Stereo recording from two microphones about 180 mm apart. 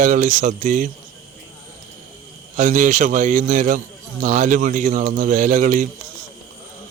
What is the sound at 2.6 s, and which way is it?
A man's voice, 45° right (ahead or behind).